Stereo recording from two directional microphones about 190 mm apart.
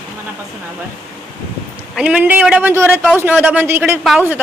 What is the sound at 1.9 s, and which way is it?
A man's voice, 5° right (ahead or behind).